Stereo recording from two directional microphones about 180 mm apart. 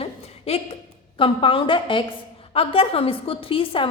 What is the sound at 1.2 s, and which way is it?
A woman's voice, 30° left (ahead or behind).